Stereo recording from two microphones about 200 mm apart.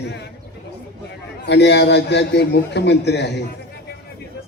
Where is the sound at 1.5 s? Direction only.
60° left (ahead or behind).